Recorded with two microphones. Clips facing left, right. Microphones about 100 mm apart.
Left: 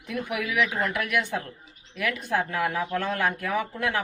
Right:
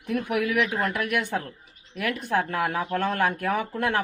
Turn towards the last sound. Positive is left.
turn(degrees=-50)  # may be behind; listen again after turning